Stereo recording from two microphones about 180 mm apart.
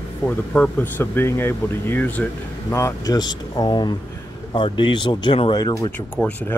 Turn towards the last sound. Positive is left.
turn(degrees=25)  # may be behind; listen again after turning